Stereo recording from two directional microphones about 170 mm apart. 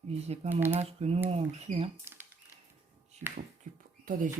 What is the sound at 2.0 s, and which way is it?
Speech, 15° right (ahead or behind).